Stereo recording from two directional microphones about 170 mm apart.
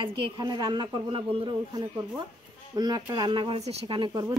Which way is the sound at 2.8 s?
25° right (ahead or behind).